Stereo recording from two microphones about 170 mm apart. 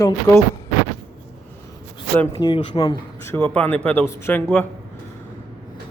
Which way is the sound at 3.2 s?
10° left (ahead or behind).